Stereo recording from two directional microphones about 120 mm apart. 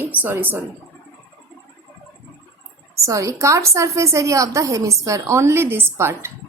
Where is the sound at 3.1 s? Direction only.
25° right (ahead or behind).